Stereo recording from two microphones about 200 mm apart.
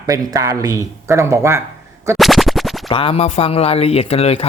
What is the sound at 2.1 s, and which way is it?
Music, centre (ahead or behind).